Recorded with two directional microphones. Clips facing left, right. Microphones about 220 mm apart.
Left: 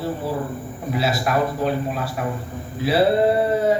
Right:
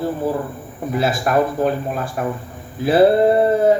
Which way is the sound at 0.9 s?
50° right (ahead or behind).